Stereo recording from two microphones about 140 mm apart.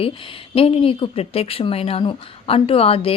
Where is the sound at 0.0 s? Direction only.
40° left (ahead or behind).